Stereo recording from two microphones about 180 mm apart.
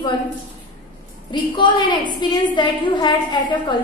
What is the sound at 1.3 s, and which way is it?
A woman's voice, 25° left (ahead or behind).